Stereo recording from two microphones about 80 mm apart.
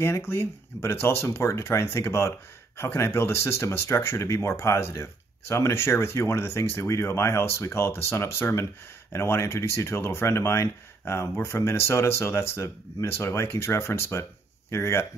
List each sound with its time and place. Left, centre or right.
0.0 s speech: left